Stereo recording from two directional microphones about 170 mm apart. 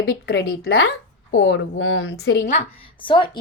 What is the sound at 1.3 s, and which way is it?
Speech, 90° left.